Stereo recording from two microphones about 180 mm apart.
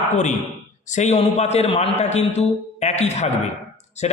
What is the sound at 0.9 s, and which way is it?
A man's voice, 40° left (ahead or behind).